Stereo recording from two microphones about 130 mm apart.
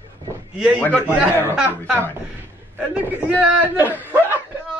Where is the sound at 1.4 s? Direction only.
10° right (ahead or behind).